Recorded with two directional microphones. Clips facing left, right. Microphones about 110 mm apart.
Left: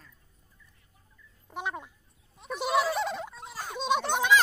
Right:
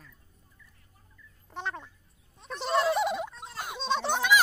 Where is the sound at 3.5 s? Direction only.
15° right (ahead or behind).